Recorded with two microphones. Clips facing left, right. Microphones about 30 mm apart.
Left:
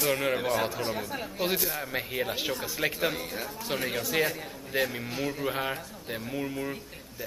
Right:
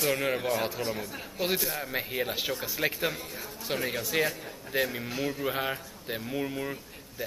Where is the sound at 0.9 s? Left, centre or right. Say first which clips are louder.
Left 2 dB; centre.